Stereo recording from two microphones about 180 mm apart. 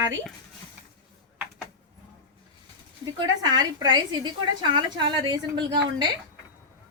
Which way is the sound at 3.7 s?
25° right (ahead or behind).